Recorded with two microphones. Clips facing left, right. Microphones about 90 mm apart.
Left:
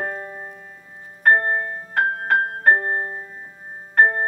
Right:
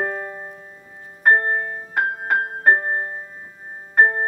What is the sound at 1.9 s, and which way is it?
Music, 10° right (ahead or behind).